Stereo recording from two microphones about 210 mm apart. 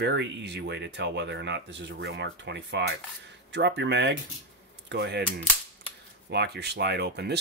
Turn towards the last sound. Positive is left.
turn(degrees=-50)  # may be behind; listen again after turning